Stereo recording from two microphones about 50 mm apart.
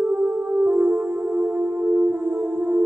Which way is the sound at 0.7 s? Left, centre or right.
Right.